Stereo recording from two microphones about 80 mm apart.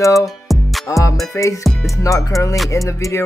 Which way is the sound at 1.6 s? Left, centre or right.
Centre.